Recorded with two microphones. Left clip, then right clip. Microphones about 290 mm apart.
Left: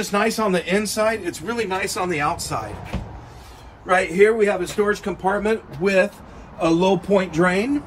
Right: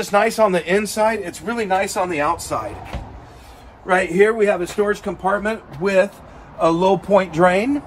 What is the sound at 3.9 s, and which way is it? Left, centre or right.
Speech, right.